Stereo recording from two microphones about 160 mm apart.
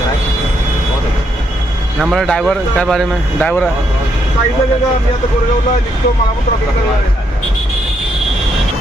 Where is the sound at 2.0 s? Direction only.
Centre (ahead or behind).